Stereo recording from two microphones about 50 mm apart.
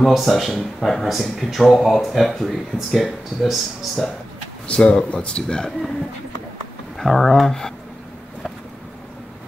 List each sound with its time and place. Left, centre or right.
0.0 s speech: centre
4.6 s speech: centre
7.0 s speech: centre